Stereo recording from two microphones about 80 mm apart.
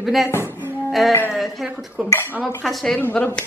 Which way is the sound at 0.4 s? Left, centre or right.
Right.